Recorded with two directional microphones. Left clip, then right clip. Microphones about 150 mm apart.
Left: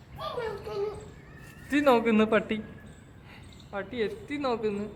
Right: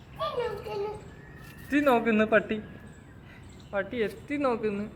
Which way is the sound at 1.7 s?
10° left (ahead or behind).